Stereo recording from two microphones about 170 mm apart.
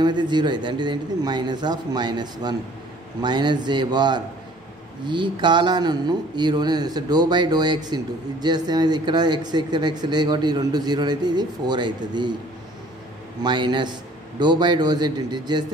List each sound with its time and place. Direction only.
0.0 s speech: 25° right (ahead or behind)
13.4 s speech: 25° right (ahead or behind)